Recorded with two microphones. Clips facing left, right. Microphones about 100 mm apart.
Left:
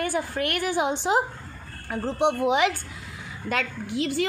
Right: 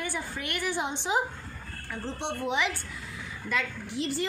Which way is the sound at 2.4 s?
75° left (ahead or behind).